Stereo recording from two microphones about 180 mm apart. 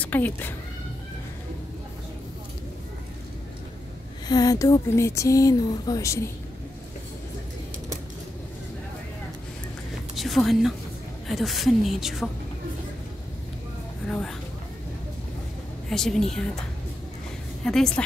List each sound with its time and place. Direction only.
0.0 s speech: 10° left (ahead or behind)
4.3 s speech: 20° left (ahead or behind)
10.1 s a woman's voice: centre (ahead or behind)
14.0 s a sound: 5° left (ahead or behind)
15.9 s a woman's voice: centre (ahead or behind)
17.6 s a woman's voice: 5° left (ahead or behind)